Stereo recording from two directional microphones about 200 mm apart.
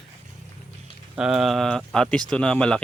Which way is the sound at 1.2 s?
Centre (ahead or behind).